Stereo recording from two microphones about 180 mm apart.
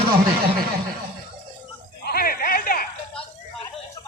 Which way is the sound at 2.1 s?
55° left (ahead or behind).